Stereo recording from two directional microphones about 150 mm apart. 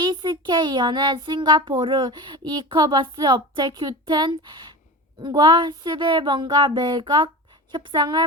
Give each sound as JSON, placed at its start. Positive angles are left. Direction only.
{"t": 0.0, "sound": "a child's voice", "side_deg": -30}